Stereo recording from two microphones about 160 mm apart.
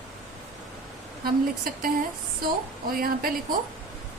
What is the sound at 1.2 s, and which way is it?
A woman's voice, 65° right (ahead or behind).